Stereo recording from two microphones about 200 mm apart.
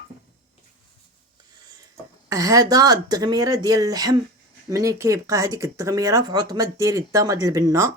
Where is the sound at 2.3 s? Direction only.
15° right (ahead or behind).